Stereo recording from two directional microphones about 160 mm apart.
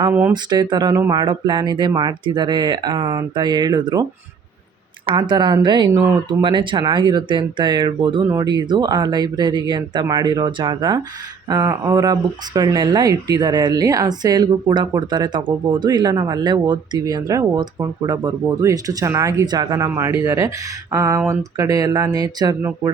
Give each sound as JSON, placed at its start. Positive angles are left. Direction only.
{"t": 0.1, "sound": "speech", "side_deg": -10}
{"t": 0.5, "sound": "speech", "side_deg": -25}
{"t": 5.0, "sound": "speech", "side_deg": -30}